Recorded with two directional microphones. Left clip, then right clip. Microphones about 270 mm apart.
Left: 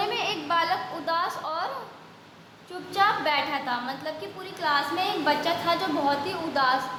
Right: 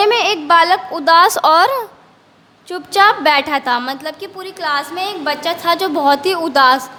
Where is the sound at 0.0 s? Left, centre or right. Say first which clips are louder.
Right 14 dB; right.